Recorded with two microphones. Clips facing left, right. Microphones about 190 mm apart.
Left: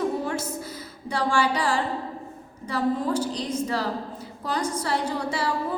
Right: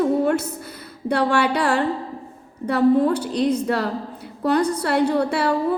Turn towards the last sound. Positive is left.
turn(degrees=-65)  # may be behind; listen again after turning